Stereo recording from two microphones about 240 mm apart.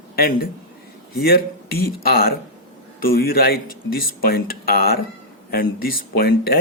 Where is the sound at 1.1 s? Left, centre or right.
Left.